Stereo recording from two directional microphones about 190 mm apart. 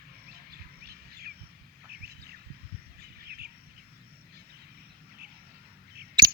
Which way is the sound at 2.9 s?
55° right (ahead or behind).